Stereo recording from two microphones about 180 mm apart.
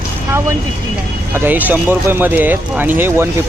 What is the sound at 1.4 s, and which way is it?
Speech, 10° right (ahead or behind).